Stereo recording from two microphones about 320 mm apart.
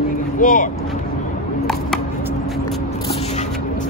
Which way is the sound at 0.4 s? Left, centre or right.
Left.